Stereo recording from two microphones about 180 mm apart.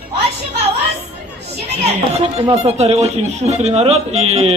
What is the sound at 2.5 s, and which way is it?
Speech, 35° right (ahead or behind).